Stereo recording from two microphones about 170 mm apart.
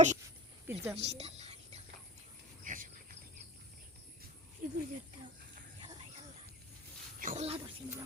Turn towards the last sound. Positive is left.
turn(degrees=-40)  # may be behind; listen again after turning